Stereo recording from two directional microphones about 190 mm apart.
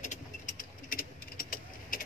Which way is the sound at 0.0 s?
40° left (ahead or behind).